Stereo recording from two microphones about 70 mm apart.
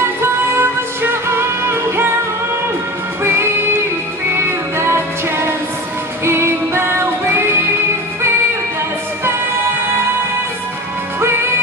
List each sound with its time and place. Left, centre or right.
0.0 s music: right
4.4 s music: right